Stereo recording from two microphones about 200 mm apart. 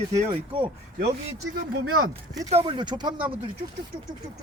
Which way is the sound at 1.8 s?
90° right.